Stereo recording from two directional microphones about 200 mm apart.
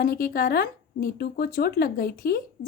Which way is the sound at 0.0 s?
45° left (ahead or behind).